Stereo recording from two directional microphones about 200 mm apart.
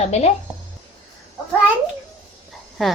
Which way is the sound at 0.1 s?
35° left (ahead or behind).